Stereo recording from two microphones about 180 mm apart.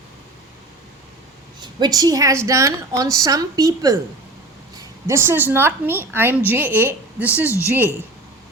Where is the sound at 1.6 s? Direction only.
20° right (ahead or behind).